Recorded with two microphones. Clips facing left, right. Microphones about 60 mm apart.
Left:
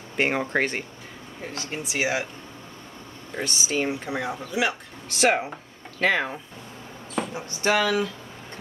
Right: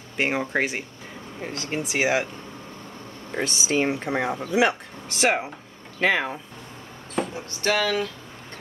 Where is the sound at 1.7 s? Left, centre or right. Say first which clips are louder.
Right 3 dB; right.